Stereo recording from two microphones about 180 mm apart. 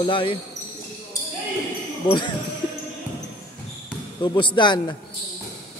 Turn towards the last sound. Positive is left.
turn(degrees=25)  # may be behind; listen again after turning